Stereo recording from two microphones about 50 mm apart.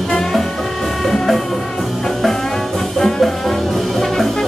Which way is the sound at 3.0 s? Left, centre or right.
Centre.